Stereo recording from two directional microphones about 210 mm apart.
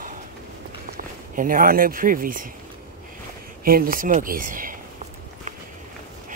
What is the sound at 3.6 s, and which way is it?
Speech, 45° right (ahead or behind).